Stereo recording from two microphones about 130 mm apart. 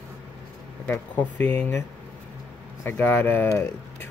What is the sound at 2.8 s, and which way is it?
Speech, 15° left (ahead or behind).